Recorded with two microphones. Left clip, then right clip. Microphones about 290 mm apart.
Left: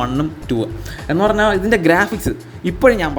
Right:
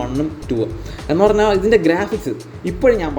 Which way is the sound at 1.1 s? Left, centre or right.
Centre.